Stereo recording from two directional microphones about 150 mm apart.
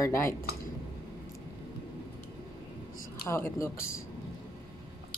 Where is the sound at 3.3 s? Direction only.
20° left (ahead or behind).